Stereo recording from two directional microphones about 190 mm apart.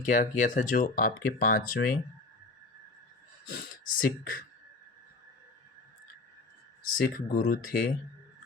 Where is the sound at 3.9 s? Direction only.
45° left (ahead or behind).